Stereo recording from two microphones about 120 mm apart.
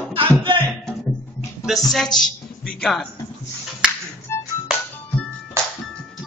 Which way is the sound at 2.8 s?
5° left (ahead or behind).